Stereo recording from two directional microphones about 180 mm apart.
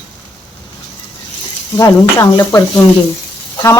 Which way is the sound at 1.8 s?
20° left (ahead or behind).